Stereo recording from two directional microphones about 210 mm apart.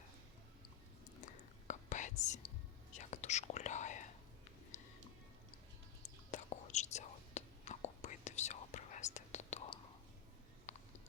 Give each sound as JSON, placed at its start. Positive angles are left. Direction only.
{"t": 1.6, "sound": "whispering", "side_deg": 35}
{"t": 6.3, "sound": "whispering", "side_deg": 35}
{"t": 10.7, "sound": "music", "side_deg": 35}